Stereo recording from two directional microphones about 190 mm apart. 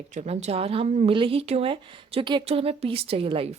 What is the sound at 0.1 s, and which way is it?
Speech, 35° right (ahead or behind).